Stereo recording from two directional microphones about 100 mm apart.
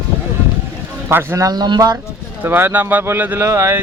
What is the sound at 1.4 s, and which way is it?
Speech, 45° right (ahead or behind).